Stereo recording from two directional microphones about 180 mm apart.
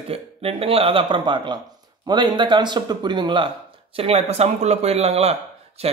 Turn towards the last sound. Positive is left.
turn(degrees=-35)  # may be behind; listen again after turning